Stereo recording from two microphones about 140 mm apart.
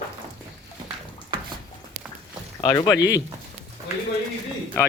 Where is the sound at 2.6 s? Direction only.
30° left (ahead or behind).